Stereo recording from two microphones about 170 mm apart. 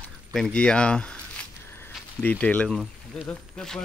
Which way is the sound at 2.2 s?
10° left (ahead or behind).